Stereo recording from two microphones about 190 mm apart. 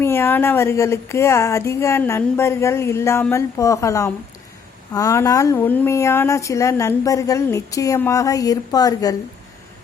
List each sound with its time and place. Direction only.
0.0 s speech: 10° left (ahead or behind)